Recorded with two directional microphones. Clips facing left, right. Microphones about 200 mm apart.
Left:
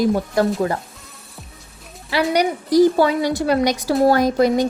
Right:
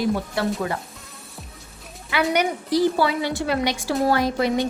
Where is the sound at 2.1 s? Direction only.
35° left (ahead or behind).